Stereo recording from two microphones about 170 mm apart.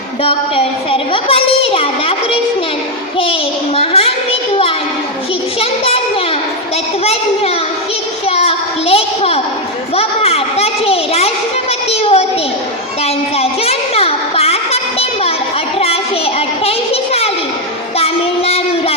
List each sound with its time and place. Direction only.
0.2 s a child's voice: 35° left (ahead or behind)
3.8 s a child's voice: 35° left (ahead or behind)
8.3 s a sound: 35° left (ahead or behind)
9.9 s a child's voice: 35° left (ahead or behind)
11.9 s a sound: 35° left (ahead or behind)
15.8 s child singing: 35° left (ahead or behind)